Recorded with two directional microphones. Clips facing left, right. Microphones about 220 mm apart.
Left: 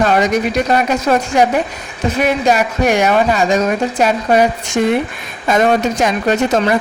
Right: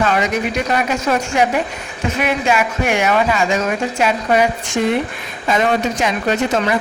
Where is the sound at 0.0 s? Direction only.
40° left (ahead or behind).